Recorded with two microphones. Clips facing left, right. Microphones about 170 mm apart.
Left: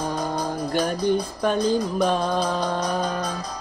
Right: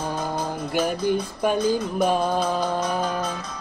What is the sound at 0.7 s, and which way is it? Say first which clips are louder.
Music: even; 5° right (ahead or behind).